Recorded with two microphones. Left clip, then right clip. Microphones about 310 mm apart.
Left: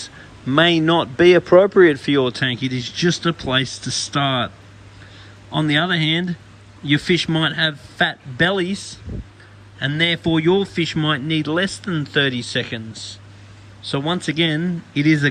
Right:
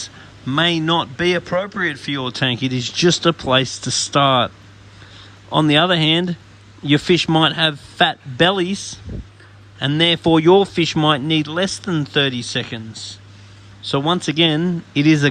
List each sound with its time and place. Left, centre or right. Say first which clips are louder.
0.4 s speech: left 2 dB; centre
3.7 s speech: right 3 dB; right
4.2 s a man's voice: right 6 dB; centre
5.5 s a man's voice: right 4 dB; centre
9.1 s a sound: even; left
9.7 s a man's voice: right 3 dB; centre